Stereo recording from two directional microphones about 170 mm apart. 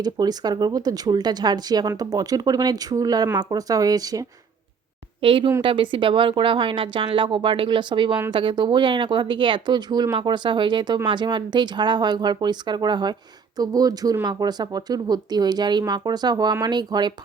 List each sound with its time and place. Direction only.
0.0 s speech: 25° right (ahead or behind)